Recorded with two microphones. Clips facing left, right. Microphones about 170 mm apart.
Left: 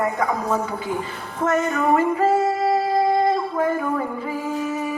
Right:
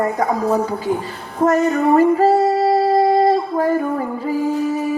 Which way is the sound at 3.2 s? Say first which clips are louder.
Right 4 dB; 35° right (ahead or behind).